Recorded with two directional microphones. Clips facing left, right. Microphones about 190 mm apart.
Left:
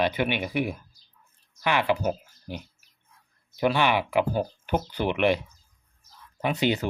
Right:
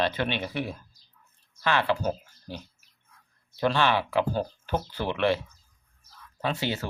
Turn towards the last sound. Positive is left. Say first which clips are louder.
# left 4 dB
turn(degrees=20)  # may be behind; listen again after turning